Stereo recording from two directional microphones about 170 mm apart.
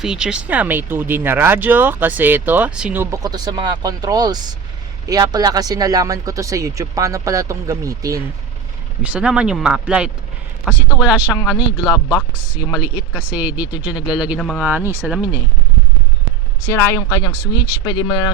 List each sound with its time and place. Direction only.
0.0 s speech: 5° right (ahead or behind); by 8.2 s 20° right (ahead or behind)
9.0 s speech: 5° right (ahead or behind)
11.5 s speech: 25° left (ahead or behind)
12.5 s speech: 10° right (ahead or behind)
16.7 s speech: 15° left (ahead or behind)